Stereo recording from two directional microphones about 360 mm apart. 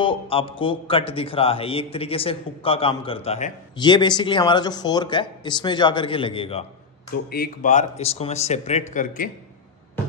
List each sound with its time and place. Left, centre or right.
0.0 s a man's voice: centre